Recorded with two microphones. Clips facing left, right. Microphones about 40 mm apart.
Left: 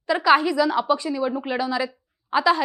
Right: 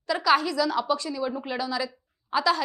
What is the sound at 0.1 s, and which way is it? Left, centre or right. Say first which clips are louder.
A woman's voice: left 5 dB; left.